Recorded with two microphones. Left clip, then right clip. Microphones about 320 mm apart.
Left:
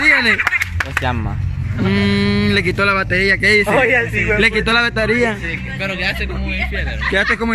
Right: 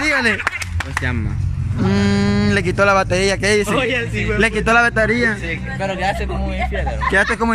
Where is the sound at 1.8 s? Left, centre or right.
Centre.